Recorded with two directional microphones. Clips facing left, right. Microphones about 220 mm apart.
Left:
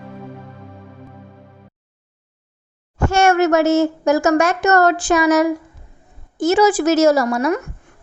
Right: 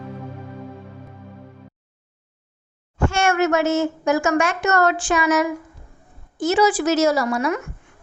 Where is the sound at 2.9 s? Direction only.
40° left (ahead or behind).